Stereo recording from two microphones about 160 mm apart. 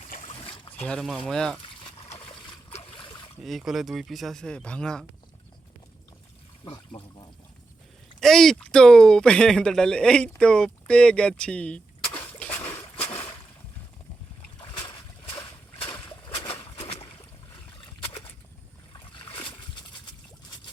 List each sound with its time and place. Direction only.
0.4 s trickle: 35° left (ahead or behind)
0.9 s speech: 5° left (ahead or behind)
1.6 s trickle: 35° left (ahead or behind)
3.4 s speech: centre (ahead or behind)
6.7 s speech: 35° left (ahead or behind)
8.2 s speech: centre (ahead or behind)
12.0 s splash: 35° left (ahead or behind)
12.4 s splash: 10° left (ahead or behind)
13.0 s a sound: 35° left (ahead or behind)
14.6 s a sound: 30° left (ahead or behind)
19.1 s splash: 35° left (ahead or behind)